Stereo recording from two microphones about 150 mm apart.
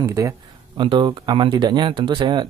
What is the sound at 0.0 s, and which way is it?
Speech, 20° right (ahead or behind).